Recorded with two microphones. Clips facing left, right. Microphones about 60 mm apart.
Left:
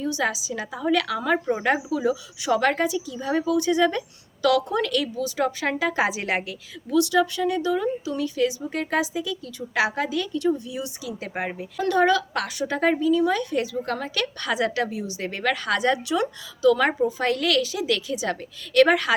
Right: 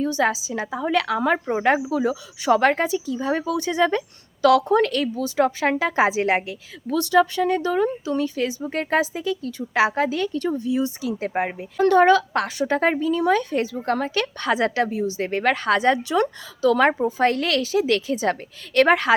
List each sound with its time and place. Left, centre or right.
0.0 s a woman's voice: right
11.8 s a woman's voice: right
16.2 s a woman's voice: right